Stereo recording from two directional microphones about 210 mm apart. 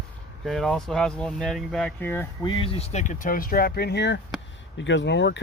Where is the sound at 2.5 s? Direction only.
25° left (ahead or behind).